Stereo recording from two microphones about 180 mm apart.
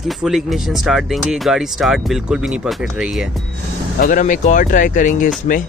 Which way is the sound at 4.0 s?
45° left (ahead or behind).